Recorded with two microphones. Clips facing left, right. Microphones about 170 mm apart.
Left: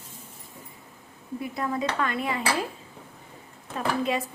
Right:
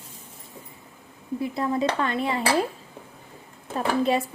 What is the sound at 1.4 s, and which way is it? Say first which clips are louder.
Speech: right 4 dB; 30° right (ahead or behind).